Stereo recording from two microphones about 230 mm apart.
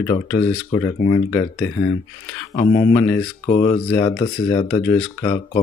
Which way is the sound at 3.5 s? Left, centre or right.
Left.